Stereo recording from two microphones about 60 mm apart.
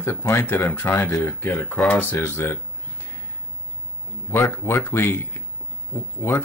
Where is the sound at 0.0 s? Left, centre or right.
Left.